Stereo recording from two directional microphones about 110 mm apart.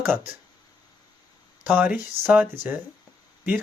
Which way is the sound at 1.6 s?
15° right (ahead or behind).